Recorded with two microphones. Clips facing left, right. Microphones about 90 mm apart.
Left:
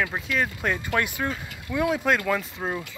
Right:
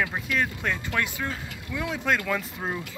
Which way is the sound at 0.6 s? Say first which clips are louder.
Left 3 dB; 15° left (ahead or behind).